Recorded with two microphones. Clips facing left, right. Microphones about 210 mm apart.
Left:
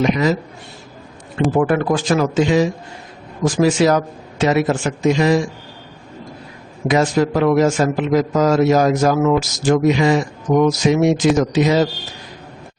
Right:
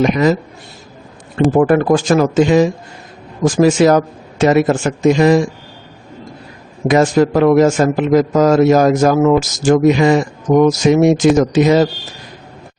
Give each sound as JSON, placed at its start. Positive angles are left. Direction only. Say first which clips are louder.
{"t": 0.0, "sound": "a man's voice", "louder": "right 4 dB", "side_deg": -50}
{"t": 1.5, "sound": "a man's voice", "louder": "right 5 dB", "side_deg": -45}
{"t": 6.8, "sound": "a man's voice", "louder": "right 4 dB", "side_deg": -50}